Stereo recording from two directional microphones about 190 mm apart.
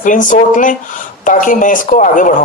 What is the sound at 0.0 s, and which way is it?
Speech, 45° left (ahead or behind).